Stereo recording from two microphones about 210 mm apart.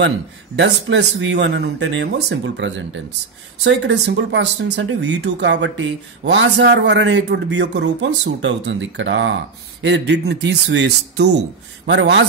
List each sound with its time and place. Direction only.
0.6 s speech: 55° right (ahead or behind)